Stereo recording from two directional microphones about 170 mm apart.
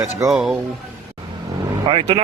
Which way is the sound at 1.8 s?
35° right (ahead or behind).